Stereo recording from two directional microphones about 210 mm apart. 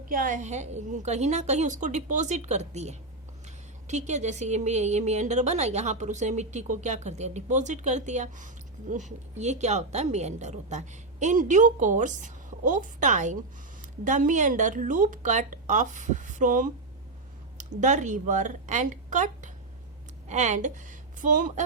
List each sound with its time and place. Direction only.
0.1 s a woman's voice: 40° right (ahead or behind)